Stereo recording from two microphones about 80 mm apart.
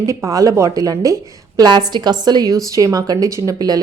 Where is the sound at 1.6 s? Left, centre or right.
Right.